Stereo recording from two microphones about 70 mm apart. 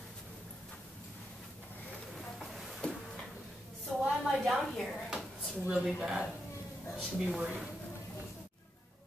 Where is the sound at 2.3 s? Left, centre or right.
Centre.